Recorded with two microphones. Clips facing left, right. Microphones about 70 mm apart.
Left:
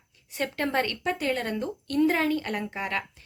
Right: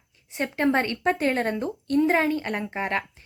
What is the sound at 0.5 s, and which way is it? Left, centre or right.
Speech, right.